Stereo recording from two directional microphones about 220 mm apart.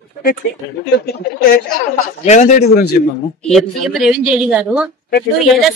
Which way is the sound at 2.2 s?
35° left (ahead or behind).